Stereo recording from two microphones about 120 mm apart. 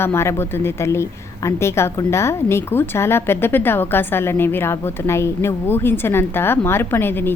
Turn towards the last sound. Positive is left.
turn(degrees=20)  # may be behind; listen again after turning